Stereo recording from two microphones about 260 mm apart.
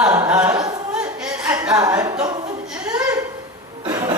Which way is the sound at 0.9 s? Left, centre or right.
Centre.